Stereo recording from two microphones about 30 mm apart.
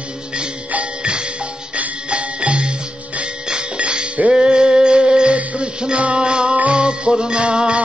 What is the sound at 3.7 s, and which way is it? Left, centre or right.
Music, right.